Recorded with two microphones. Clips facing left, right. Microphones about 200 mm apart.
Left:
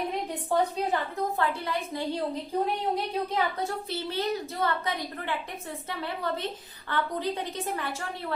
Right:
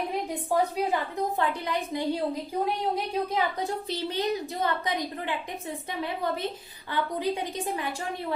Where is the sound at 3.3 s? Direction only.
15° right (ahead or behind).